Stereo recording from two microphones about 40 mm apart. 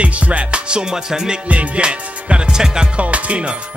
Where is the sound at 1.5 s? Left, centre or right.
Right.